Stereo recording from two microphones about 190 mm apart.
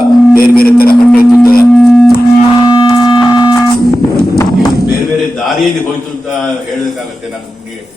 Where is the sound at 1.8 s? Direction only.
5° left (ahead or behind).